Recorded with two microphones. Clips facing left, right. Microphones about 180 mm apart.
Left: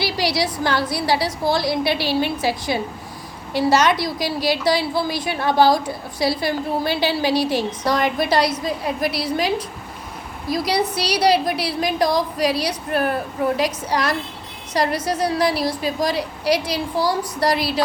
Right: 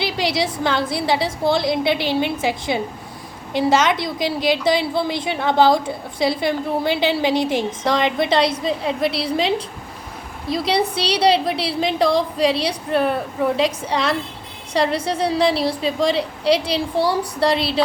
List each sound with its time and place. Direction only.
0.0 s a woman's voice: 20° right (ahead or behind)